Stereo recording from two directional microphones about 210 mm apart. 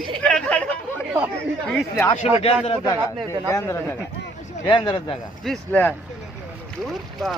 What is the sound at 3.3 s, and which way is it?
Speech, 15° left (ahead or behind).